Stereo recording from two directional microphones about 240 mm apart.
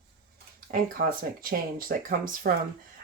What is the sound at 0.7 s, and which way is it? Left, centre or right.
Speech, right.